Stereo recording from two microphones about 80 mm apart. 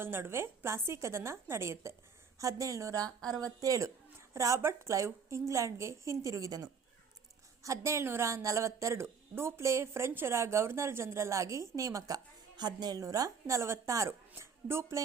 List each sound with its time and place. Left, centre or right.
0.0 s a woman's voice: right